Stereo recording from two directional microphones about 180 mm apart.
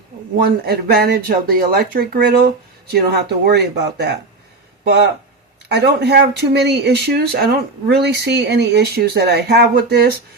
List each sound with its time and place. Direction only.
0.4 s speech: 60° right (ahead or behind)
5.6 s speech: 65° right (ahead or behind)